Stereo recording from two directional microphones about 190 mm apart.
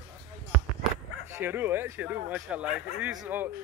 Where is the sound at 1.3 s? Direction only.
10° right (ahead or behind).